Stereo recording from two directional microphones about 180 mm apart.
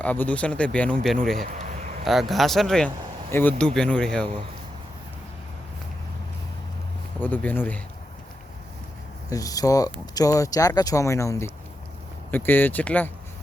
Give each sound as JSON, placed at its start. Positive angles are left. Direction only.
{"t": 0.0, "sound": "speech", "side_deg": 10}
{"t": 1.4, "sound": "a sound", "side_deg": -45}
{"t": 2.3, "sound": "speech", "side_deg": 0}
{"t": 7.2, "sound": "speech", "side_deg": 10}
{"t": 9.3, "sound": "speech", "side_deg": 20}